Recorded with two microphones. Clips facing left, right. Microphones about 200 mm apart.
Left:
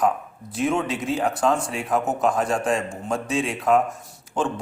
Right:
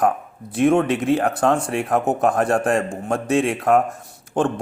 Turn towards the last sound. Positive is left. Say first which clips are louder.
# right 5 dB
turn(degrees=-55)  # may be behind; listen again after turning